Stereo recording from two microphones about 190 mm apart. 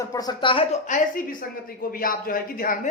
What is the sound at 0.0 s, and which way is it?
Speech, 20° left (ahead or behind).